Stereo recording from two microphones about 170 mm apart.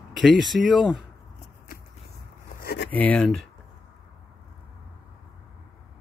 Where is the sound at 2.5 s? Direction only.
75° left (ahead or behind).